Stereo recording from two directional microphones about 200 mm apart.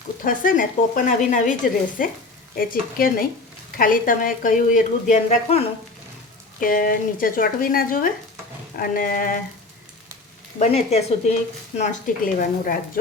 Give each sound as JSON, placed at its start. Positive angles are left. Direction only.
{"t": 0.3, "sound": "a woman's voice", "side_deg": 45}
{"t": 6.6, "sound": "a woman's voice", "side_deg": 45}
{"t": 10.6, "sound": "speech", "side_deg": 35}